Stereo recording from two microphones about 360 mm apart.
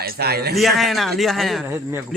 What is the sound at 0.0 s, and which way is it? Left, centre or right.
Speech, right.